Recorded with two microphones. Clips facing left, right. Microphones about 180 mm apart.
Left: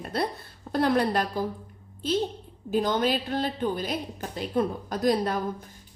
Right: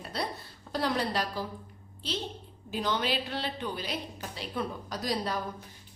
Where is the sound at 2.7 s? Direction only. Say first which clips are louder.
Left 6 dB; 45° left (ahead or behind).